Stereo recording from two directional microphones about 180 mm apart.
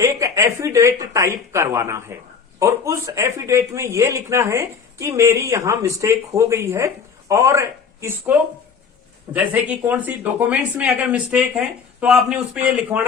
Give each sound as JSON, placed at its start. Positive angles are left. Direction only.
{"t": 0.0, "sound": "speech", "side_deg": -15}
{"t": 9.3, "sound": "speech", "side_deg": -10}